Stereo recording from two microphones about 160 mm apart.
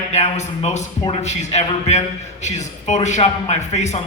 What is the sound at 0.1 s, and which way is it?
A man's voice, 45° left (ahead or behind).